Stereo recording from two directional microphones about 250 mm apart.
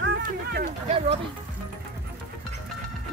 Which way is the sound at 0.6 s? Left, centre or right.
Right.